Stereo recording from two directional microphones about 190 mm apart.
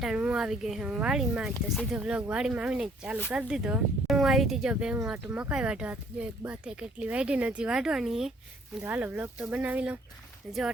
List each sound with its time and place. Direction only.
0.0 s speech: 5° right (ahead or behind)